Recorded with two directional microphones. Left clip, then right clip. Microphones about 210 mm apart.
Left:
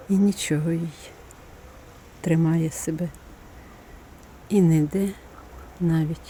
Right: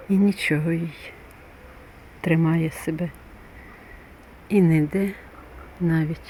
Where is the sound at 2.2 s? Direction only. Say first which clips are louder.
Right 1 dB; 5° left (ahead or behind).